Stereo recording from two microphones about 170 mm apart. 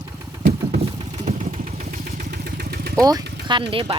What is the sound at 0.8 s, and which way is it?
Vehicle, 40° right (ahead or behind).